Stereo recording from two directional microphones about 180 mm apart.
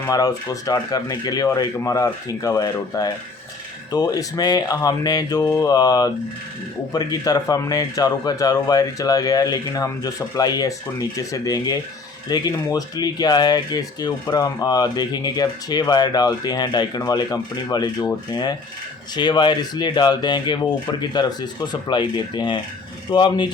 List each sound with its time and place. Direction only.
0.1 s speech: 20° left (ahead or behind)